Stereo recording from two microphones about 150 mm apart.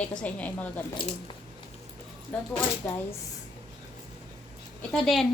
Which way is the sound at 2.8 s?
10° left (ahead or behind).